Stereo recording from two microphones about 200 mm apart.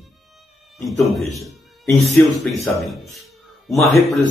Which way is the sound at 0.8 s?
Centre (ahead or behind).